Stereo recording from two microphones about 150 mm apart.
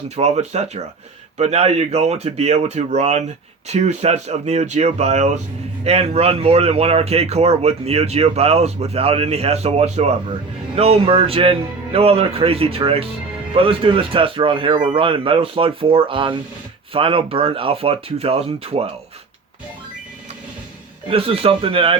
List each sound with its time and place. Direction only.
0.2 s a man's voice: 45° right (ahead or behind)
21.1 s a man's voice: 40° right (ahead or behind)